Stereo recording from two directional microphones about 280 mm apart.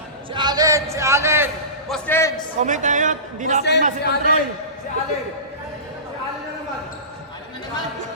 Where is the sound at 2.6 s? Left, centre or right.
Right.